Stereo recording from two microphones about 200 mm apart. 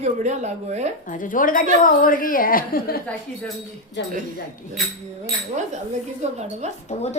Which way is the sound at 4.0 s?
60° left (ahead or behind).